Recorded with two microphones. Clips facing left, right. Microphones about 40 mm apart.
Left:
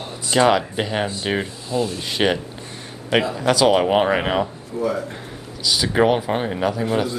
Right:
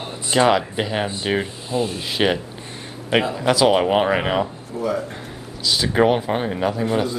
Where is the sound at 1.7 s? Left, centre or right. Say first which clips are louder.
Left 1 dB; centre.